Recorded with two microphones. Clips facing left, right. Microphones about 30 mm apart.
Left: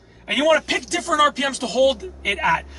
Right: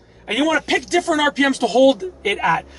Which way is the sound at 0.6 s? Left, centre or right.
Centre.